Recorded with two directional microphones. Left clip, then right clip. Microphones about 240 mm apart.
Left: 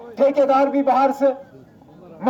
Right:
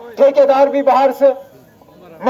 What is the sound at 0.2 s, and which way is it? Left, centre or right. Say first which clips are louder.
A man's voice: right 6 dB; right.